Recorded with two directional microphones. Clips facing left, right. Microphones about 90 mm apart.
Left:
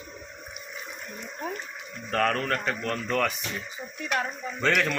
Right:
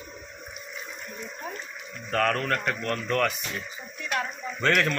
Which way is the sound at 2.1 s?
5° left (ahead or behind).